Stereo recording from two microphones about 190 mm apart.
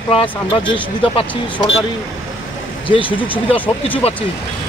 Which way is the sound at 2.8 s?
25° left (ahead or behind).